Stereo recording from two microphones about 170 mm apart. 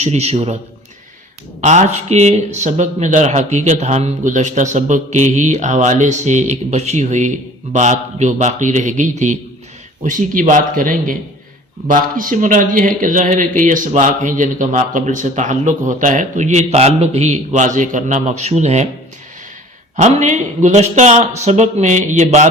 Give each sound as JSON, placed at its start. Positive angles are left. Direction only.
{"t": 0.0, "sound": "a man's voice", "side_deg": -40}
{"t": 1.6, "sound": "speech", "side_deg": -45}
{"t": 20.0, "sound": "speech", "side_deg": -45}